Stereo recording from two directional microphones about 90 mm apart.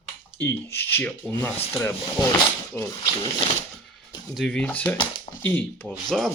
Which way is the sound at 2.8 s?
50° left (ahead or behind).